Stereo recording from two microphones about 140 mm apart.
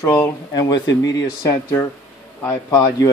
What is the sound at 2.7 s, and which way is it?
Speech, 25° left (ahead or behind).